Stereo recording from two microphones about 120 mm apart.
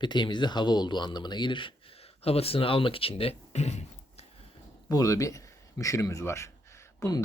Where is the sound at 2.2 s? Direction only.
55° left (ahead or behind).